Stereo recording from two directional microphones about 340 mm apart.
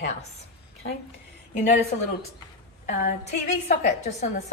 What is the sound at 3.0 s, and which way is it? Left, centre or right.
Speech, left.